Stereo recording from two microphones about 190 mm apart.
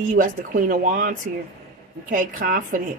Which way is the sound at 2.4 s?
50° right (ahead or behind).